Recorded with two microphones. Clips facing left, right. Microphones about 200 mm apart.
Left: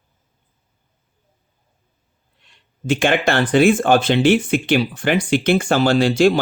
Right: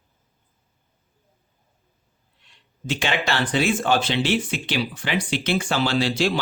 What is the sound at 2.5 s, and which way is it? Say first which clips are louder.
Speech: left 8 dB; 50° left (ahead or behind).